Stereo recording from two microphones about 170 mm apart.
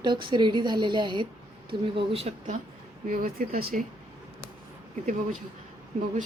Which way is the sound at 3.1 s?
55° right (ahead or behind).